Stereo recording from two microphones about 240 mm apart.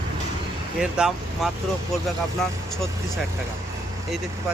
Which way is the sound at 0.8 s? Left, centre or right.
Centre.